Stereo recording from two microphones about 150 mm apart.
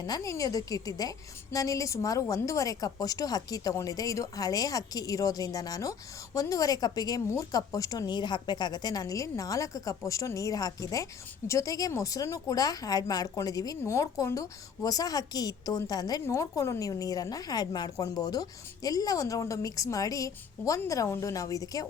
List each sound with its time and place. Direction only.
0.0 s a woman's voice: 25° left (ahead or behind)